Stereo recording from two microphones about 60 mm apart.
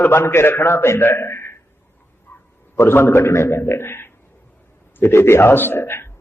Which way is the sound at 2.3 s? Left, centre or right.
Left.